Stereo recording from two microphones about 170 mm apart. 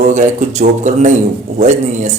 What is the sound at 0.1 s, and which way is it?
Speech, 45° right (ahead or behind).